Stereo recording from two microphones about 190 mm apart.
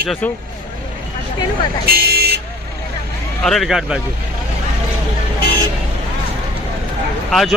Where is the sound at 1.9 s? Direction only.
55° right (ahead or behind).